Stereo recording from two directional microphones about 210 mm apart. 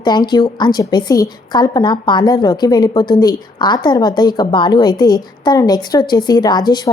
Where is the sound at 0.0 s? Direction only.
20° left (ahead or behind).